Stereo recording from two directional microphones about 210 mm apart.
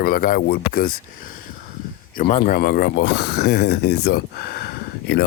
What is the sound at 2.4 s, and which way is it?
Speech, 45° left (ahead or behind).